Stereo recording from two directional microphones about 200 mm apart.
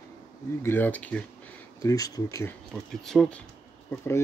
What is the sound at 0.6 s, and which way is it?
Speech, 10° left (ahead or behind).